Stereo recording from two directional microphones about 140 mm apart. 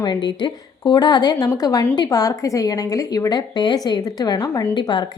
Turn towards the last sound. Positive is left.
turn(degrees=35)  # may be behind; listen again after turning